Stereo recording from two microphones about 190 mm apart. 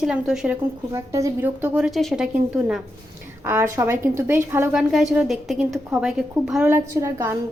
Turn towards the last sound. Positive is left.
turn(degrees=-15)  # may be behind; listen again after turning